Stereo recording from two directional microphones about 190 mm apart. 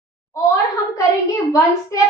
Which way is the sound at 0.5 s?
15° left (ahead or behind).